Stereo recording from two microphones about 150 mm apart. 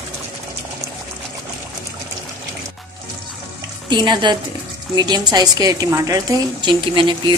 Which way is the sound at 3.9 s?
30° right (ahead or behind).